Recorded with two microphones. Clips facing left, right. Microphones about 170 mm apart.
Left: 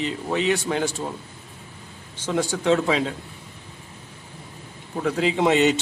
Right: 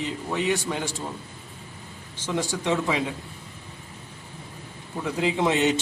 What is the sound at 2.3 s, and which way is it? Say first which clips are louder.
Speech: left 5 dB; 90° left.